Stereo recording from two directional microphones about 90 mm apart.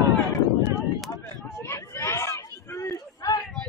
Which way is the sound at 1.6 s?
30° left (ahead or behind).